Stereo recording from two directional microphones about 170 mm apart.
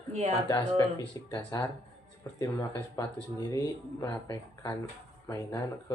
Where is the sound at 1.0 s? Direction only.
30° left (ahead or behind).